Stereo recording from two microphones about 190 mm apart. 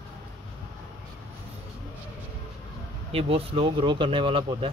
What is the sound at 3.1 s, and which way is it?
Speech, 30° right (ahead or behind).